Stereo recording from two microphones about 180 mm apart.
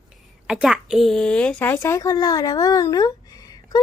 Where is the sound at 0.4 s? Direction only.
5° right (ahead or behind).